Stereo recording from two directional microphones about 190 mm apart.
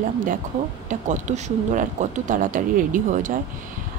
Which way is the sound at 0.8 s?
40° right (ahead or behind).